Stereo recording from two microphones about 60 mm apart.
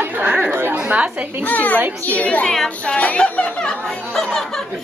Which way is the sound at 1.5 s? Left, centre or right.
Left.